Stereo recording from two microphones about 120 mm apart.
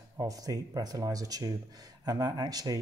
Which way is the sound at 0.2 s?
30° right (ahead or behind).